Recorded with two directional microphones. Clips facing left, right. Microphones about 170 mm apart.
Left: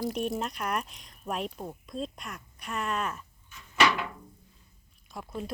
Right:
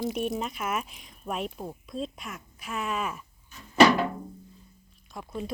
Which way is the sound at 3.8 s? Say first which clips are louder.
Right 7 dB; 40° right (ahead or behind).